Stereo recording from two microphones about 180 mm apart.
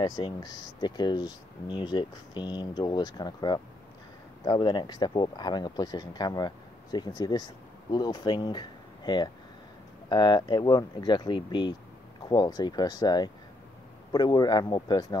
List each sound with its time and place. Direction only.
0.0 s speech: 25° left (ahead or behind)